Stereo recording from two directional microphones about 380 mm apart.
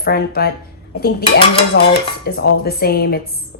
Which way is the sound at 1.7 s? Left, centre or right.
Left.